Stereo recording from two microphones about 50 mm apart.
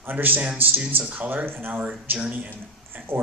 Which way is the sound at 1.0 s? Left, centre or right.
Right.